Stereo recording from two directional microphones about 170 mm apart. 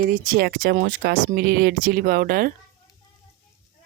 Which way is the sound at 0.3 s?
65° right (ahead or behind).